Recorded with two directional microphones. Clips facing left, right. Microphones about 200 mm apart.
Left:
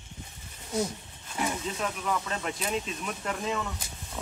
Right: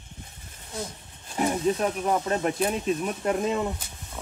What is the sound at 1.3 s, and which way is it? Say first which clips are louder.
Speech: right 8 dB; 35° right (ahead or behind).